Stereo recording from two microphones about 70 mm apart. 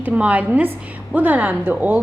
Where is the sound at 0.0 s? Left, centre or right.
Centre.